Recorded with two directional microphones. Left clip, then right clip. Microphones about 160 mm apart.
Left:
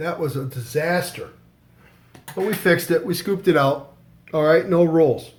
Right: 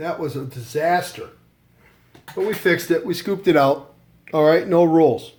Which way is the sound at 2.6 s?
25° right (ahead or behind).